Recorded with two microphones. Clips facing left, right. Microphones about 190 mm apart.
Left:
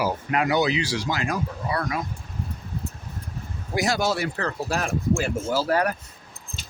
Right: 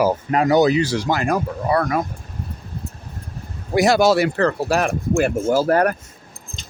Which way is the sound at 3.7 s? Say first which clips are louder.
Right 9 dB; 70° right (ahead or behind).